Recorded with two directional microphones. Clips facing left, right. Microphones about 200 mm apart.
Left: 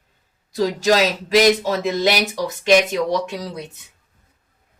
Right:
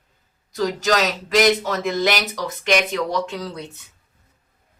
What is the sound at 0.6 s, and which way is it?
Speech, 25° left (ahead or behind).